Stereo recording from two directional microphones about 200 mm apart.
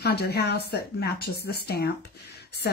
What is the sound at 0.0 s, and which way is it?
Speech, 55° left (ahead or behind).